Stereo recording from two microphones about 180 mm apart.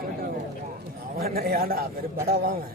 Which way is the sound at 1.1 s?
55° right (ahead or behind).